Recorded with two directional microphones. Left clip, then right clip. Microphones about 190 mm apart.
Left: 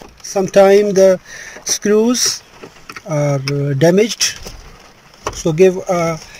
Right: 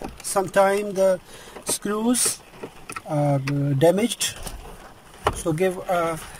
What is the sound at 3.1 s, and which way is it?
Speech, 5° left (ahead or behind).